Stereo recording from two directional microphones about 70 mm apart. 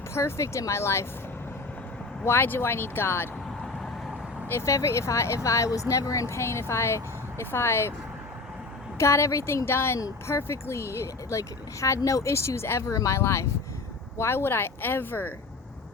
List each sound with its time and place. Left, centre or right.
0.1 s speech: left
2.2 s speech: left
4.4 s speech: left
9.0 s speech: left